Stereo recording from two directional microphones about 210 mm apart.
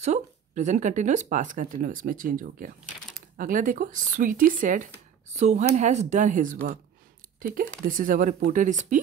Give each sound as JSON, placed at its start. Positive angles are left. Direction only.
{"t": 0.0, "sound": "speech", "side_deg": -35}
{"t": 7.8, "sound": "speech", "side_deg": -40}